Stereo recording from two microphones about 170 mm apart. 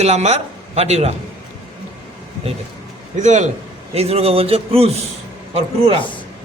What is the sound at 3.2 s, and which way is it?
A man's voice, 45° right (ahead or behind).